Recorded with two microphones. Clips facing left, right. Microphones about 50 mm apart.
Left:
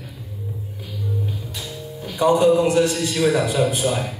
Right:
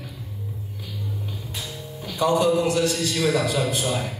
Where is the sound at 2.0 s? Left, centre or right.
Left.